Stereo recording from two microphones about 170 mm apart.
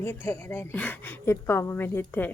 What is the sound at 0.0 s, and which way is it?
Speech, 10° left (ahead or behind).